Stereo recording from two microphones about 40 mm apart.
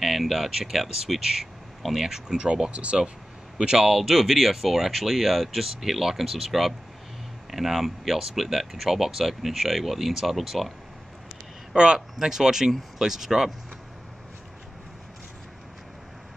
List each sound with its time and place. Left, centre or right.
0.0 s speech: centre
2.0 s a man's voice: centre
3.8 s speech: centre
11.7 s speech: centre